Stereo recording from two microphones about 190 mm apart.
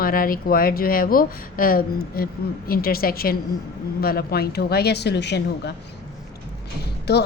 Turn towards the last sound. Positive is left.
turn(degrees=60)  # may be behind; listen again after turning